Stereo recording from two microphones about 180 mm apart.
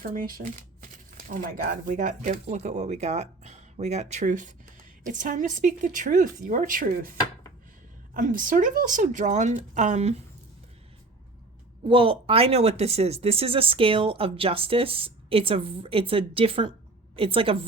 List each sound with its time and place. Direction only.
0.0 s speech: 55° right (ahead or behind)
8.1 s speech: 50° right (ahead or behind)
11.8 s speech: 30° right (ahead or behind)